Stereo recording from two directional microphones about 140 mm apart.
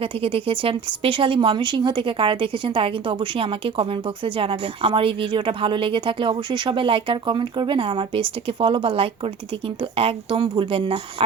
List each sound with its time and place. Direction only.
0.0 s speech: 40° right (ahead or behind)